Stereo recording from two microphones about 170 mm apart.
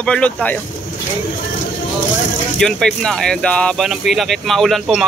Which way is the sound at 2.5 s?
Centre (ahead or behind).